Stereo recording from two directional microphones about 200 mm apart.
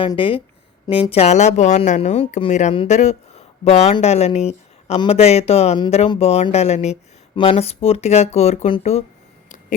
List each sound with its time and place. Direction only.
0.0 s speech: 25° left (ahead or behind)